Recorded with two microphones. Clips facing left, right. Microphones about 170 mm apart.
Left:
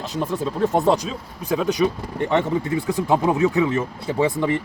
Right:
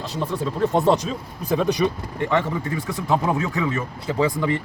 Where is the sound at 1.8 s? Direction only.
Centre (ahead or behind).